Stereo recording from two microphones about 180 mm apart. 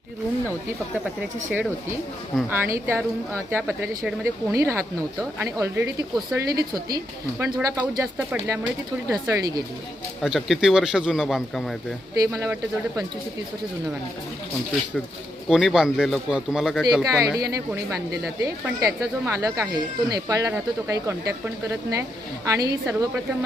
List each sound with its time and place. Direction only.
2.5 s speech: 15° right (ahead or behind)
10.2 s speech: centre (ahead or behind)
12.2 s speech: 15° right (ahead or behind)
15.4 s speech: centre (ahead or behind)
17.0 s speech: 20° right (ahead or behind)